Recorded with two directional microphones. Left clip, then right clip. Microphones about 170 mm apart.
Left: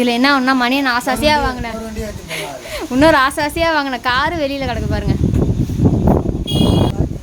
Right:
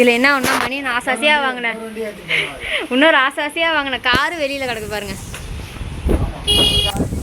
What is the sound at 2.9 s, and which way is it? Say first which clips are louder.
A woman's voice: left 2 dB; 15° left (ahead or behind).